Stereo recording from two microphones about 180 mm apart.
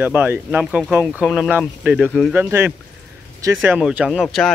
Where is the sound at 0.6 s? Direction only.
Centre (ahead or behind).